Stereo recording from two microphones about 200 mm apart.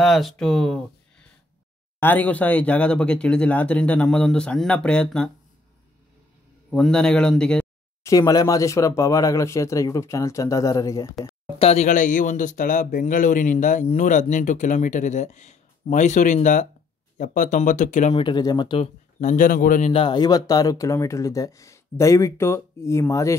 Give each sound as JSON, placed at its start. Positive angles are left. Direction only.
{"t": 0.0, "sound": "speech", "side_deg": 0}
{"t": 2.0, "sound": "speech", "side_deg": 10}
{"t": 6.7, "sound": "speech", "side_deg": 5}
{"t": 8.0, "sound": "speech", "side_deg": 15}
{"t": 11.5, "sound": "speech", "side_deg": 30}
{"t": 18.1, "sound": "speech", "side_deg": 20}
{"t": 19.9, "sound": "speech", "side_deg": 25}